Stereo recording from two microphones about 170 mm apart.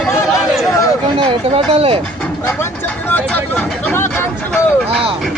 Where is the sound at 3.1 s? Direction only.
10° left (ahead or behind).